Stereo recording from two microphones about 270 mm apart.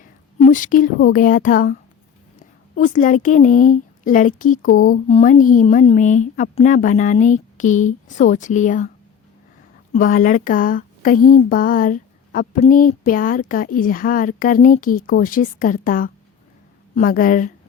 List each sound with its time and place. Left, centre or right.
0.0 s a sound: left
0.9 s speech: left
2.8 s a woman's voice: left
9.9 s speech: left